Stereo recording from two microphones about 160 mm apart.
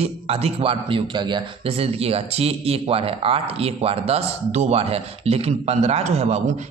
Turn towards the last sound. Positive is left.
turn(degrees=-45)  # may be behind; listen again after turning